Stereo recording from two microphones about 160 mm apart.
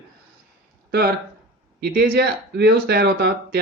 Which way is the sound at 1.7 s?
80° right.